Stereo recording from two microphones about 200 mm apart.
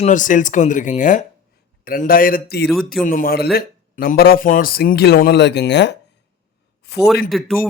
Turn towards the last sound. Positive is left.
turn(degrees=0)  # may be behind; listen again after turning